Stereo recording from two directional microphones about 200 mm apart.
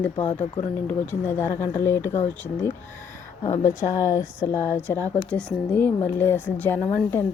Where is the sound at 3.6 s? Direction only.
15° left (ahead or behind).